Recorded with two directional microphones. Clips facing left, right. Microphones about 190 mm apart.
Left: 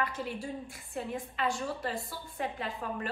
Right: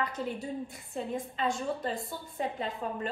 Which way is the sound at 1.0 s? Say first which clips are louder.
Right 2 dB; 20° right (ahead or behind).